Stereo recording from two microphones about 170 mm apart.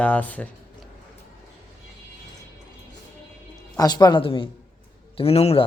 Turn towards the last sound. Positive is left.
turn(degrees=35)  # may be behind; listen again after turning